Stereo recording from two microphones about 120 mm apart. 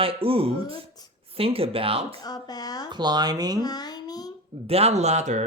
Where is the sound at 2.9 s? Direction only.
35° right (ahead or behind).